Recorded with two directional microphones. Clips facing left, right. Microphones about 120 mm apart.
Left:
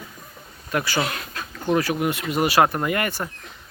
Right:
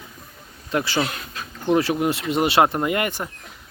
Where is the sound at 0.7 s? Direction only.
25° right (ahead or behind).